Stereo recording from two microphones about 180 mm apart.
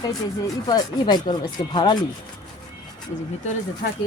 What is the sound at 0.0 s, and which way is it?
Speech, 20° left (ahead or behind).